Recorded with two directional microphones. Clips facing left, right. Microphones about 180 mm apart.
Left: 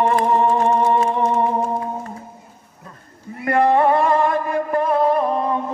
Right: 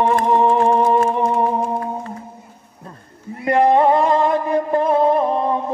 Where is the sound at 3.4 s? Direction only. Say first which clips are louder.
Right 2 dB; 20° right (ahead or behind).